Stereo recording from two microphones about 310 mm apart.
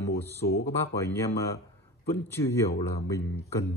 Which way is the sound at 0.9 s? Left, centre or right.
Centre.